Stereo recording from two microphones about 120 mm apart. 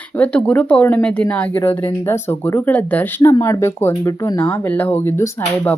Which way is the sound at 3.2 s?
25° left (ahead or behind).